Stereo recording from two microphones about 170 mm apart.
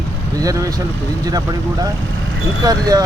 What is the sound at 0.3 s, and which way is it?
Speech, 20° right (ahead or behind).